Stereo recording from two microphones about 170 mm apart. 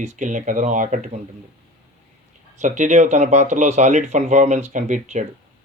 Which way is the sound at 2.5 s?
45° right (ahead or behind).